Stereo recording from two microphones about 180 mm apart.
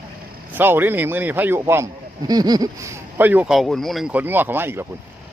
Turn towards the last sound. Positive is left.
turn(degrees=-10)  # may be behind; listen again after turning